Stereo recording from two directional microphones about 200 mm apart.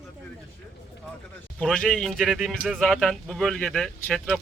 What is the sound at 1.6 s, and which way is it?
Speech, 5° left (ahead or behind).